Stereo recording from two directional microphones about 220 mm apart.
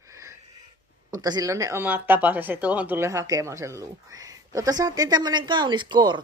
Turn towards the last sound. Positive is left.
turn(degrees=-20)  # may be behind; listen again after turning